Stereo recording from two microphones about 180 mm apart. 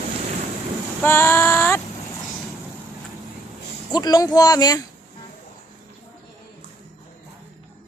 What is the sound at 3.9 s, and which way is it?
Speech, 20° left (ahead or behind).